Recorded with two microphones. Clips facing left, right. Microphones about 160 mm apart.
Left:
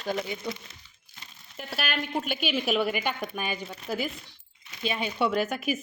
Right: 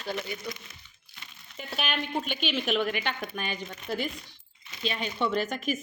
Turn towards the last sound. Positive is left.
turn(degrees=10)  # may be behind; listen again after turning